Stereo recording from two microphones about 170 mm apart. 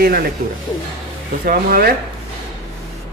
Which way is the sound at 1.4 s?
60° right (ahead or behind).